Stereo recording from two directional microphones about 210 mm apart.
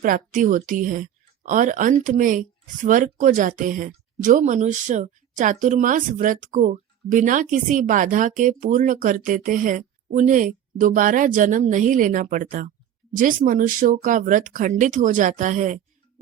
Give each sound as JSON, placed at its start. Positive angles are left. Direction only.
{"t": 0.0, "sound": "a woman's voice", "side_deg": -40}